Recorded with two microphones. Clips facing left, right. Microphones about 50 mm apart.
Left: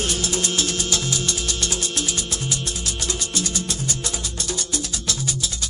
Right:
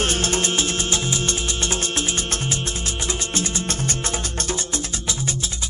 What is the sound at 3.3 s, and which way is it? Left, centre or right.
Music, right.